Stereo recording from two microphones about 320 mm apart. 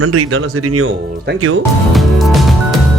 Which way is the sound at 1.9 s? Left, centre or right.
Centre.